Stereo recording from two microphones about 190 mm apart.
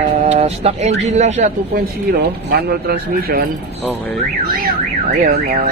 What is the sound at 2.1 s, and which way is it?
Speech, 55° right (ahead or behind).